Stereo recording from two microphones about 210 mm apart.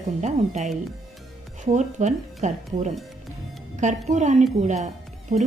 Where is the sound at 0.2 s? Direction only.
35° right (ahead or behind).